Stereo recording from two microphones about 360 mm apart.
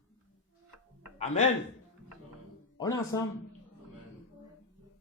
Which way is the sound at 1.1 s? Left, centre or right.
Centre.